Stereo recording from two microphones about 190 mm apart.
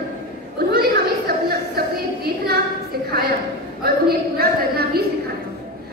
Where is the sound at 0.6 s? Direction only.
55° right (ahead or behind).